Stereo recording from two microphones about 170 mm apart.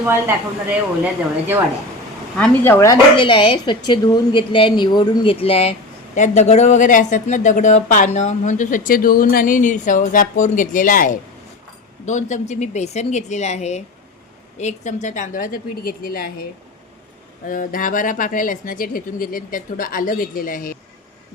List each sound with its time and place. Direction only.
0.0 s speech: 10° right (ahead or behind)
2.4 s speech: 15° left (ahead or behind); by 20.7 s 55° left (ahead or behind)